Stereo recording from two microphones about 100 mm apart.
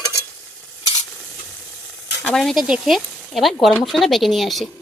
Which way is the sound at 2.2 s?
5° left (ahead or behind).